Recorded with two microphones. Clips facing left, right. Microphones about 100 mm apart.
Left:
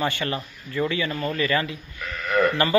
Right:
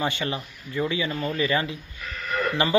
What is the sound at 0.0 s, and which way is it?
A man's voice, 15° right (ahead or behind).